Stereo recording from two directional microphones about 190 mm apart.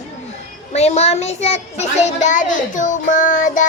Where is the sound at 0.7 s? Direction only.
35° left (ahead or behind).